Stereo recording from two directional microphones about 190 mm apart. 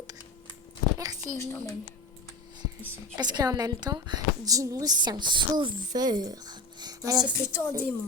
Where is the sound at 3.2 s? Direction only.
20° right (ahead or behind).